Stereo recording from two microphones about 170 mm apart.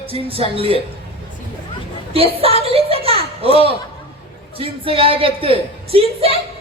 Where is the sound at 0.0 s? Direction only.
35° right (ahead or behind).